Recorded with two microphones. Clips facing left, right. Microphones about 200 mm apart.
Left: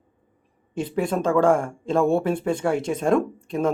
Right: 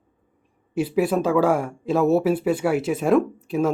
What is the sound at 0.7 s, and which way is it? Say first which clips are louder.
Speech: right 4 dB; 5° right (ahead or behind).